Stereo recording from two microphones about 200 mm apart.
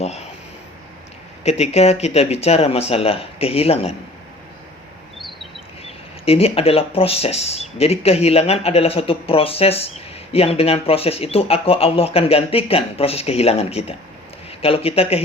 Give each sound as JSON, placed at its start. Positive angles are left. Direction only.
{"t": 1.5, "sound": "speech", "side_deg": 30}
{"t": 5.2, "sound": "chirp", "side_deg": 0}
{"t": 5.8, "sound": "speech", "side_deg": 30}